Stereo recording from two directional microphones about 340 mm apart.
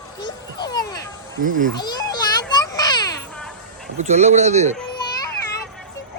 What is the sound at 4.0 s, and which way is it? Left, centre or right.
Speech, centre.